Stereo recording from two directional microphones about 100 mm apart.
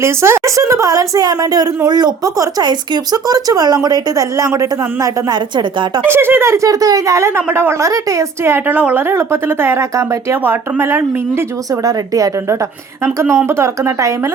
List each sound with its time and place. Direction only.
0.0 s a woman's voice: 25° right (ahead or behind)
5.3 s a woman's voice: 50° right (ahead or behind)
6.1 s speech: 25° right (ahead or behind)
11.7 s a woman's voice: 35° right (ahead or behind)